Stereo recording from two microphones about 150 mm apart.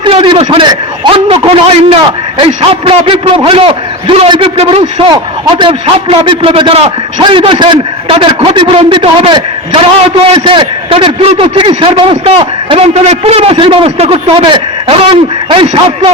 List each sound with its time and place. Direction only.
0.0 s a man's voice: 35° right (ahead or behind)